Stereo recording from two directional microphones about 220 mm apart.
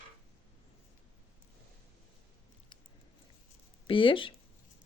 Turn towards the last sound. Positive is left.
turn(degrees=25)  # may be behind; listen again after turning